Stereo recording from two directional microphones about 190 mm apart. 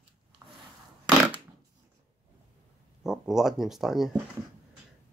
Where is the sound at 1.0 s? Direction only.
10° right (ahead or behind).